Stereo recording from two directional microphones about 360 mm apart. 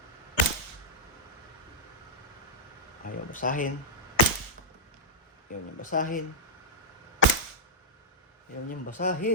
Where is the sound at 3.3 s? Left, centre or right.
Left.